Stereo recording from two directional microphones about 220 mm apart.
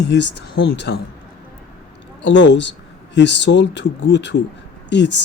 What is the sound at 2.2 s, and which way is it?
Speech, 55° left (ahead or behind).